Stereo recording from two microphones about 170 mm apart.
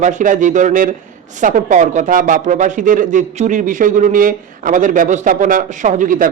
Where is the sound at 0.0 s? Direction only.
45° right (ahead or behind).